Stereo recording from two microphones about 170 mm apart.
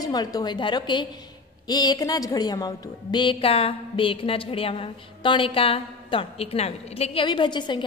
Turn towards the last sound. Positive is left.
turn(degrees=25)  # may be behind; listen again after turning